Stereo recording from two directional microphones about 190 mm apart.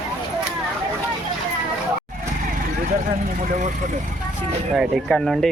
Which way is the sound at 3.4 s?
45° right (ahead or behind).